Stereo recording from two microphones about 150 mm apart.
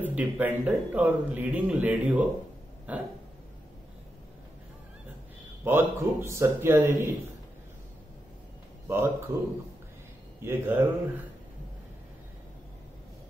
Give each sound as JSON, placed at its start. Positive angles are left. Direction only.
{"t": 0.1, "sound": "speech", "side_deg": -10}
{"t": 5.6, "sound": "speech", "side_deg": -15}
{"t": 8.8, "sound": "speech", "side_deg": -15}
{"t": 10.4, "sound": "speech", "side_deg": -15}